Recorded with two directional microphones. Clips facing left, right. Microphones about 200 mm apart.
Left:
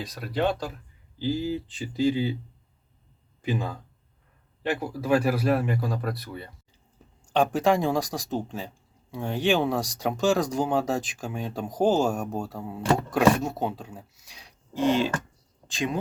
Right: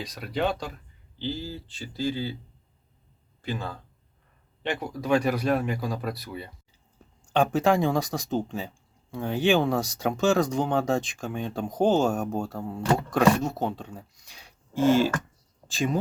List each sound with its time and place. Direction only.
0.0 s speech: centre (ahead or behind)
1.2 s speech: 15° left (ahead or behind)
3.4 s speech: 15° left (ahead or behind)
4.6 s speech: 5° left (ahead or behind)
7.0 s a sound: centre (ahead or behind)
7.3 s speech: centre (ahead or behind)